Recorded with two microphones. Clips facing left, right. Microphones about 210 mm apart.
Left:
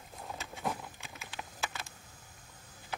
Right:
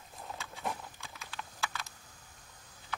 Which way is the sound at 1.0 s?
20° left (ahead or behind).